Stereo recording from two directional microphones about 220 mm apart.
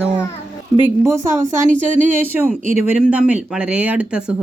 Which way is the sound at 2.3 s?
10° right (ahead or behind).